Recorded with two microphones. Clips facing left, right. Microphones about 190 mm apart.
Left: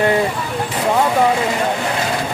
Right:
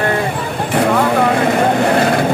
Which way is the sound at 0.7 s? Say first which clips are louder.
Right 4 dB; 60° right (ahead or behind).